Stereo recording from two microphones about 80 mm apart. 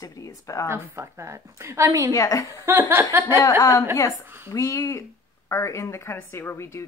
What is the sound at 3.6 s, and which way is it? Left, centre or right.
A woman's voice, left.